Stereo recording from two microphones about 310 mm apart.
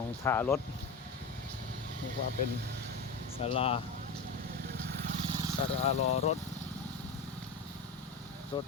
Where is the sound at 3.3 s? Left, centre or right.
Centre.